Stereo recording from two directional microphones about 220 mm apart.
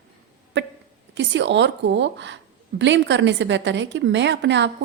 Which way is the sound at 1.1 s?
55° right (ahead or behind).